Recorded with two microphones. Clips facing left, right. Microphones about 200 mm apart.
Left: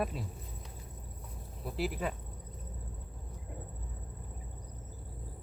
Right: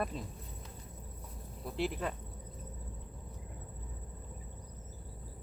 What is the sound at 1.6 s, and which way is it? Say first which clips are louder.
Speech: even; 5° left (ahead or behind).